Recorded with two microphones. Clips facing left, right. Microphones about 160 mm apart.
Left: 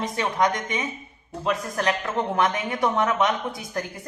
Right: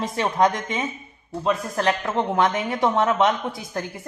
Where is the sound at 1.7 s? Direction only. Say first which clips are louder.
Right 2 dB; 25° right (ahead or behind).